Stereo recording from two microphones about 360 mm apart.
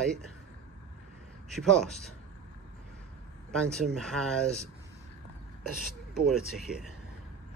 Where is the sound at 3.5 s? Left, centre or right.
Centre.